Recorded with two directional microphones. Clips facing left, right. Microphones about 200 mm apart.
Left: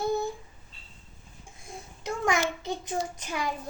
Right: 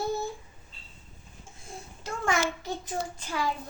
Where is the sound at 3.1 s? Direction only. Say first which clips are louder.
Right 1 dB; 20° left (ahead or behind).